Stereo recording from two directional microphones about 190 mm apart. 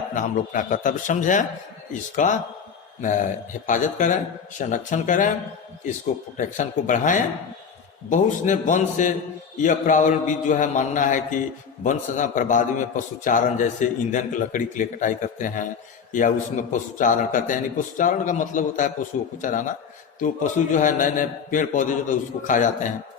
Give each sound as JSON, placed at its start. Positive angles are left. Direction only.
{"t": 0.1, "sound": "a man's voice", "side_deg": 45}
{"t": 6.3, "sound": "a man's voice", "side_deg": 40}